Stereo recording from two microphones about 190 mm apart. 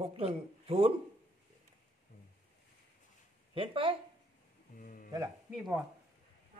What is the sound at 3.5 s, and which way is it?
Speech, 30° right (ahead or behind).